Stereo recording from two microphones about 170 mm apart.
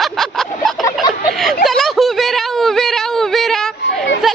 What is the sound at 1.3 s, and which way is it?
Speech, centre (ahead or behind).